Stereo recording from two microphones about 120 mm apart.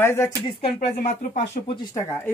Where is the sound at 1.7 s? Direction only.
40° left (ahead or behind).